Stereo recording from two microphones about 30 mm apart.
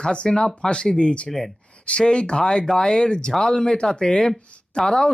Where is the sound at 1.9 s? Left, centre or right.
Left; by 3.7 s centre.